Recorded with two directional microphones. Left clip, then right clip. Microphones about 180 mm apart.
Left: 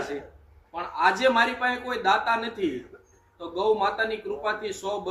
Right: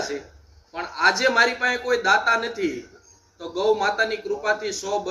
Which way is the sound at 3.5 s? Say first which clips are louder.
Right 3 dB; 15° left (ahead or behind).